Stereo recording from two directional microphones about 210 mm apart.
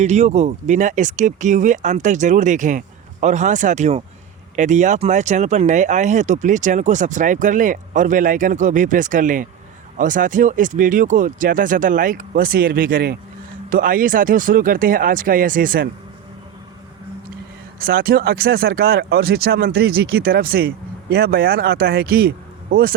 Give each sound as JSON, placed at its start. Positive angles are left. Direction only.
{"t": 0.0, "sound": "speech", "side_deg": -35}
{"t": 17.7, "sound": "speech", "side_deg": -45}